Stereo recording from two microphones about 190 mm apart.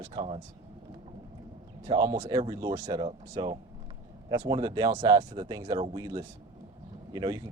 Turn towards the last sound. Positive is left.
turn(degrees=-20)  # may be behind; listen again after turning